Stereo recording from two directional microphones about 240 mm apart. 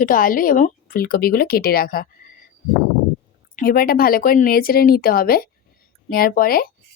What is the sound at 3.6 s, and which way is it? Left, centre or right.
Speech, left.